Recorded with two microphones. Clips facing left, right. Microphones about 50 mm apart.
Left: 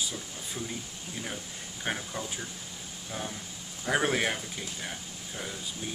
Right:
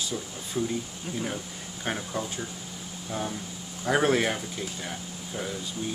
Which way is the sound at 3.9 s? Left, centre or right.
Centre.